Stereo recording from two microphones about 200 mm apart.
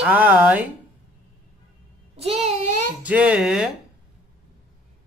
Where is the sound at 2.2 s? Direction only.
30° right (ahead or behind).